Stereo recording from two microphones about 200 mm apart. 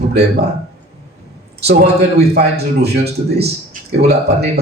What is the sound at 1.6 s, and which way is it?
A man's voice, 55° right (ahead or behind).